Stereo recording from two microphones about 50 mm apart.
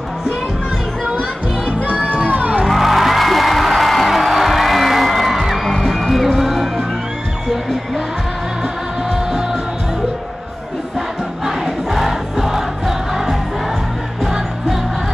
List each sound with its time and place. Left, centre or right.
1.9 s music: right
2.6 s music: centre
9.1 s music: centre
11.0 s music: centre